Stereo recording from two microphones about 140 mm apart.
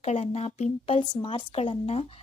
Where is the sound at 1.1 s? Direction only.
35° left (ahead or behind).